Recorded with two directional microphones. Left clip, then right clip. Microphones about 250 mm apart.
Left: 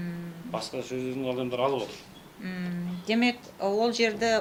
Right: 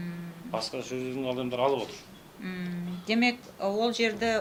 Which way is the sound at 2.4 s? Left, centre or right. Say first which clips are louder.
Left 1 dB; centre.